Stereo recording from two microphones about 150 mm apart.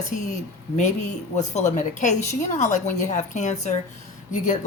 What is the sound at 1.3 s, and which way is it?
Speech, 50° left (ahead or behind).